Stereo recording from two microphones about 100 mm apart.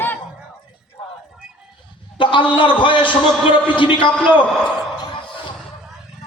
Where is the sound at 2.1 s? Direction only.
55° left (ahead or behind).